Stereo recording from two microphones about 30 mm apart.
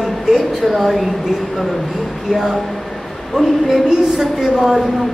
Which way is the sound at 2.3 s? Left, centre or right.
Centre.